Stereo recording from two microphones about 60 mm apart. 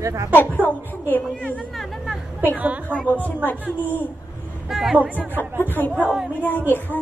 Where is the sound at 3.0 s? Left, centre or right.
Left.